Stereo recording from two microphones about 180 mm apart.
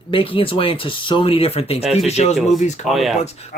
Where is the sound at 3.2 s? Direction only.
35° left (ahead or behind).